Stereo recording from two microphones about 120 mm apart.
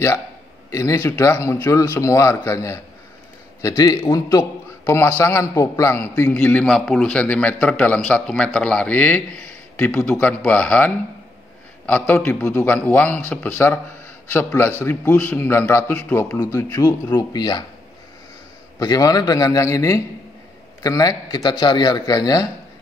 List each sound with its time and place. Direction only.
0.7 s a man's voice: 25° left (ahead or behind)
6.6 s a man's voice: 5° left (ahead or behind); by 17.6 s 35° left (ahead or behind)
18.8 s a man's voice: 30° left (ahead or behind)